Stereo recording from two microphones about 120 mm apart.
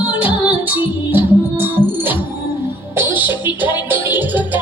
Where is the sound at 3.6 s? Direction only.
15° right (ahead or behind).